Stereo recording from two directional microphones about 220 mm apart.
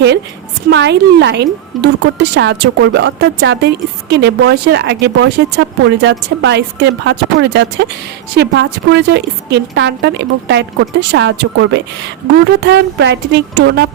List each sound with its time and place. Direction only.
0.7 s speech: 50° right (ahead or behind)